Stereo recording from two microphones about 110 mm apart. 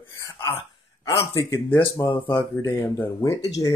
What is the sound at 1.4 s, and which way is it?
Speech, 20° left (ahead or behind).